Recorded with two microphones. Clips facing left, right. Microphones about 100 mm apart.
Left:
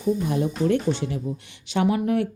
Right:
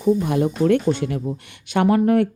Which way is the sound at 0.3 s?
65° right (ahead or behind).